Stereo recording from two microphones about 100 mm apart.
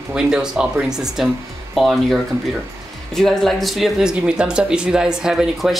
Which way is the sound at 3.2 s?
Centre (ahead or behind).